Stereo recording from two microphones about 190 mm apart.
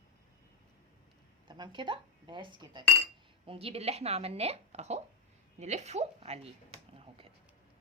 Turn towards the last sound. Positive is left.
turn(degrees=-30)  # may be behind; listen again after turning